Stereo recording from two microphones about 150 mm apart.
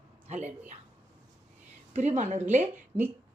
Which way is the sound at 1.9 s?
50° right (ahead or behind).